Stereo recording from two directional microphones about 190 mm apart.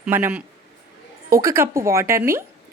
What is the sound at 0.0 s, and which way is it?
A woman's voice, 10° right (ahead or behind).